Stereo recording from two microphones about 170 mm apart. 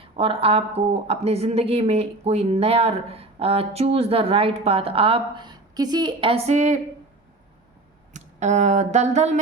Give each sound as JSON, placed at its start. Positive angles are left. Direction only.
{"t": 0.0, "sound": "speech", "side_deg": -35}
{"t": 8.1, "sound": "speech", "side_deg": -40}